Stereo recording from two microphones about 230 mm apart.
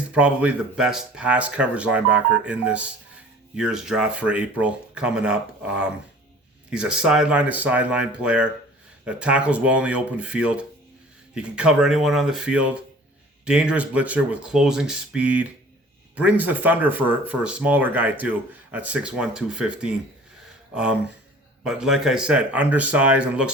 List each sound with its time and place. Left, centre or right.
0.1 s speech: centre
21.6 s speech: centre